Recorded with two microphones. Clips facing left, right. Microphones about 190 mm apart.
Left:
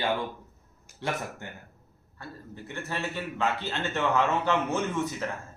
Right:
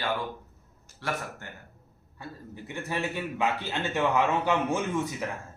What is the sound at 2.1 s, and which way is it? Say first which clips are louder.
A man's voice: right 1 dB; 15° right (ahead or behind).